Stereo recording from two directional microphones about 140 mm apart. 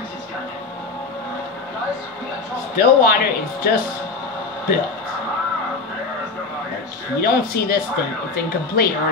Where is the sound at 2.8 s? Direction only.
90° left.